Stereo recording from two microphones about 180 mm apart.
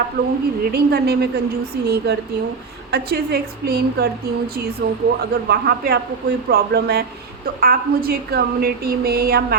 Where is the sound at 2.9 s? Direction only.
60° right (ahead or behind).